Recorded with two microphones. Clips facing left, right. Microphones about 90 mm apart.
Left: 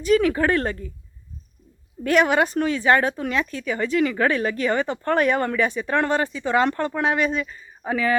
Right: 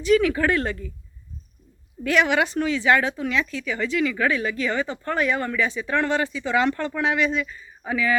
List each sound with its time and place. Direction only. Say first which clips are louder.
0.0 s speech: left 1 dB; 40° left (ahead or behind)
2.0 s a woman's voice: left 2 dB; 40° left (ahead or behind)